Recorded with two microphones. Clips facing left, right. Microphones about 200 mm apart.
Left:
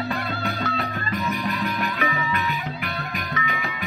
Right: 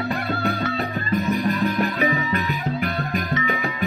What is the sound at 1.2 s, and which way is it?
Music, 30° right (ahead or behind).